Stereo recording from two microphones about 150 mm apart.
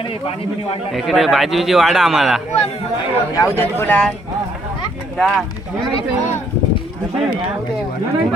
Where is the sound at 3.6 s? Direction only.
10° left (ahead or behind).